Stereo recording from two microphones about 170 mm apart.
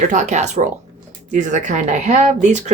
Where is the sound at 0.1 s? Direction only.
45° right (ahead or behind).